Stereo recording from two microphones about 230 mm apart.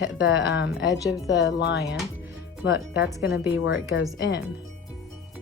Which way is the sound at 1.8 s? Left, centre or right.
Centre.